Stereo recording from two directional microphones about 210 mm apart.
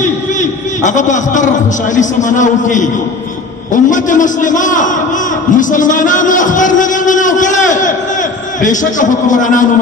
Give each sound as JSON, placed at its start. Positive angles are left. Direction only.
{"t": 0.0, "sound": "a man's voice", "side_deg": 35}